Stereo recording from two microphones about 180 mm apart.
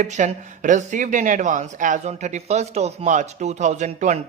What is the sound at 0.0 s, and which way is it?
Speech, 40° right (ahead or behind).